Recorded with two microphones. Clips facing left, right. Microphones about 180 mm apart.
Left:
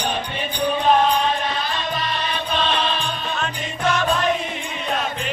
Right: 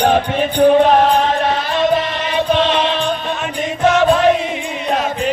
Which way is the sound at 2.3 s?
75° right (ahead or behind).